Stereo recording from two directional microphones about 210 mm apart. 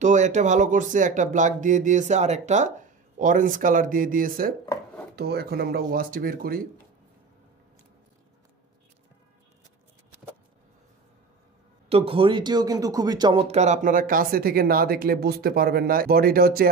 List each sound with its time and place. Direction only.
0.0 s speech: 35° right (ahead or behind)
11.9 s speech: 25° right (ahead or behind); by 16.6 s 45° right (ahead or behind)